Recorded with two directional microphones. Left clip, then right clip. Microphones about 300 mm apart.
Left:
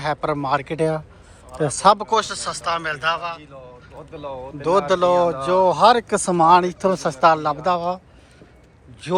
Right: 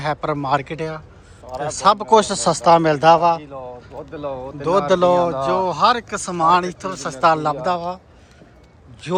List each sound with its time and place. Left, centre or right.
0.0 s speech: centre; by 4.5 s right
4.6 s speech: centre
9.0 s speech: centre